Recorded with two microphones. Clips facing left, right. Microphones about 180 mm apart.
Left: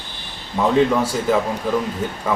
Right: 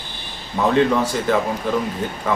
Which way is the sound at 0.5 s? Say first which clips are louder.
Even; 5° left (ahead or behind).